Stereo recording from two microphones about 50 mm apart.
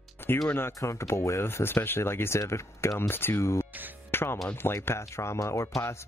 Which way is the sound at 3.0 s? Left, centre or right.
Left.